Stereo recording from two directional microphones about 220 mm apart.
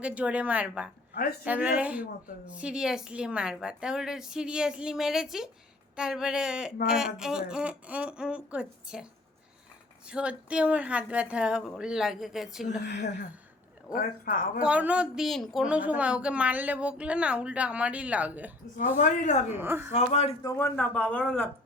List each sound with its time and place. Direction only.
0.0 s a woman's voice: 5° right (ahead or behind)
10.1 s a woman's voice: 5° right (ahead or behind)
12.9 s speech: 50° left (ahead or behind)
13.9 s speech: 40° left (ahead or behind)
14.6 s a woman's voice: 5° right (ahead or behind)
18.9 s speech: 35° left (ahead or behind)
19.5 s a woman's voice: 10° right (ahead or behind)
19.9 s a man's voice: 30° left (ahead or behind)
20.4 s speech: 15° left (ahead or behind)